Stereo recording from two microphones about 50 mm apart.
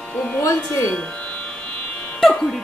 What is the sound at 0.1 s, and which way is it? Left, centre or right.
Speech, left.